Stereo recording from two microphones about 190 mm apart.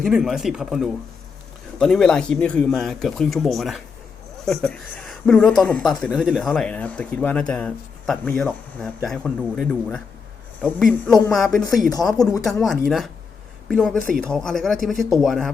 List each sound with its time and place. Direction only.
0.0 s speech: centre (ahead or behind)
11.9 s speech: 20° left (ahead or behind)
12.5 s speech: centre (ahead or behind)